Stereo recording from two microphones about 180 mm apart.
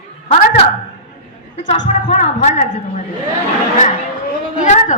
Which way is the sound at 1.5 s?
40° left (ahead or behind).